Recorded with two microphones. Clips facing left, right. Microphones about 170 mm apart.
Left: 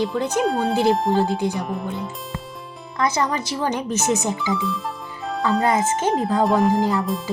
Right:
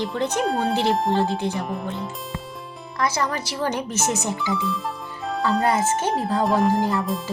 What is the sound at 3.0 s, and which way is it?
A woman's voice, 20° left (ahead or behind).